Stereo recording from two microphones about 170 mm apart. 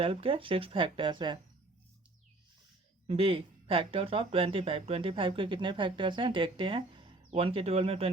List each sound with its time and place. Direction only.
0.0 s speech: 35° right (ahead or behind)
3.1 s speech: 35° right (ahead or behind)